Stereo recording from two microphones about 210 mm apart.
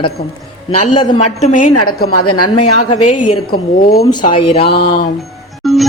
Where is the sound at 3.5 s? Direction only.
45° left (ahead or behind).